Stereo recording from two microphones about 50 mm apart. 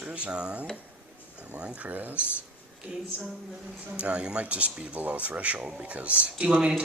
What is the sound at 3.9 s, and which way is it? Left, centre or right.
Speech, right.